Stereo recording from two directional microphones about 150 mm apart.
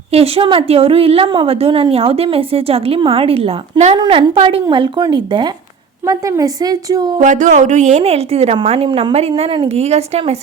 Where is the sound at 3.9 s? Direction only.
30° right (ahead or behind).